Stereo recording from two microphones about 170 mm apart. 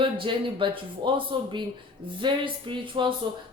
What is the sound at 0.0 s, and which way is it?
Speech, 30° right (ahead or behind).